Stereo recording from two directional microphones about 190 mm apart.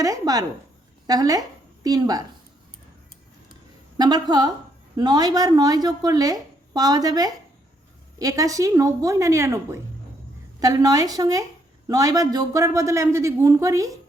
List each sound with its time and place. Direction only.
0.0 s a man's voice: 20° right (ahead or behind)
3.5 s a sound: 20° right (ahead or behind)
4.9 s a man's voice: 20° right (ahead or behind)